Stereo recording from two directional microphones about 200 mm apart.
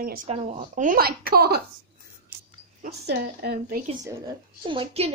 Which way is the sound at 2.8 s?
55° right (ahead or behind).